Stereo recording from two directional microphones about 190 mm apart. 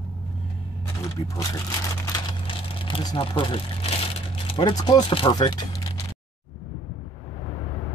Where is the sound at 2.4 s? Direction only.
30° left (ahead or behind).